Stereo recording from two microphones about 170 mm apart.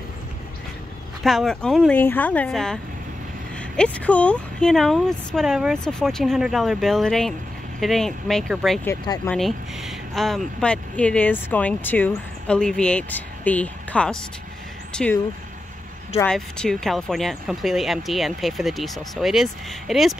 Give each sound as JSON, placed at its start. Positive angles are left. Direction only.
{"t": 1.2, "sound": "speech", "side_deg": 0}
{"t": 9.0, "sound": "speech", "side_deg": 25}
{"t": 9.3, "sound": "speech", "side_deg": 0}
{"t": 16.3, "sound": "speech", "side_deg": 5}